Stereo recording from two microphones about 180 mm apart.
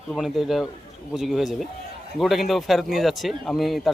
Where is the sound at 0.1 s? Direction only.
Centre (ahead or behind).